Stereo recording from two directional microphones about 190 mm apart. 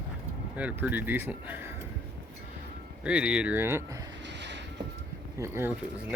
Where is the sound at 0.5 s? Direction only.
10° right (ahead or behind).